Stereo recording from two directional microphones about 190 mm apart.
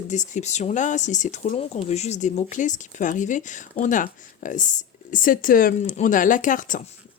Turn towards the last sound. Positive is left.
turn(degrees=45)  # may be behind; listen again after turning